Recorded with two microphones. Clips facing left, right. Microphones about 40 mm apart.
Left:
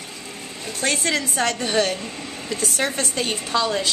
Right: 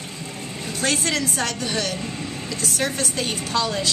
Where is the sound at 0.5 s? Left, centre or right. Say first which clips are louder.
Even; centre; by 1.9 s left.